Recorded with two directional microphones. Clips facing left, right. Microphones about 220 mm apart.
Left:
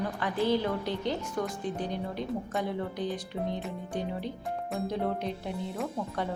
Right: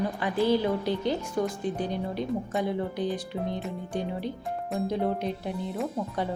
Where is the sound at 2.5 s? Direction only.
10° right (ahead or behind).